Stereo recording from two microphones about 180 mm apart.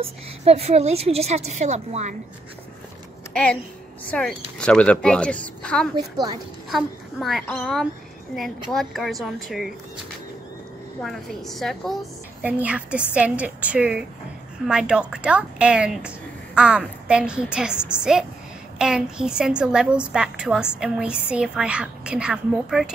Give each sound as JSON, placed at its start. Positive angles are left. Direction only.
{"t": 0.0, "sound": "a woman's voice", "side_deg": -35}
{"t": 4.1, "sound": "a woman's voice", "side_deg": 5}
{"t": 11.0, "sound": "a woman's voice", "side_deg": 0}
{"t": 12.4, "sound": "a woman's voice", "side_deg": -10}